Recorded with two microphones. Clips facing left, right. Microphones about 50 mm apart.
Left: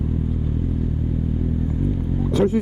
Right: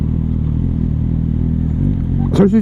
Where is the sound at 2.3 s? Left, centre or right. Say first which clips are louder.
Right 7 dB; right.